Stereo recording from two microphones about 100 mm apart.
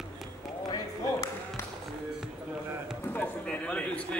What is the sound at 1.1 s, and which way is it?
Music, 30° left (ahead or behind).